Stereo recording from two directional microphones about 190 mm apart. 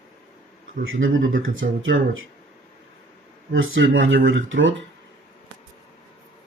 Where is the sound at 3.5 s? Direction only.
90° right.